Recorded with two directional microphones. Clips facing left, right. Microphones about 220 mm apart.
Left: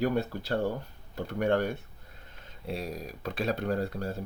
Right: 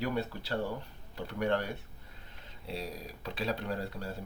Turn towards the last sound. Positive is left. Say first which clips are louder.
# left 6 dB
turn(degrees=45)  # may be behind; listen again after turning